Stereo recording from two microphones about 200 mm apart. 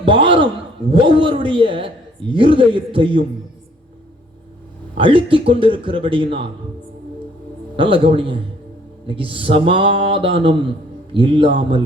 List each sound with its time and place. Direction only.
0.0 s a man's voice: 25° right (ahead or behind)
4.9 s a man's voice: 25° right (ahead or behind)
7.8 s a man's voice: 25° right (ahead or behind)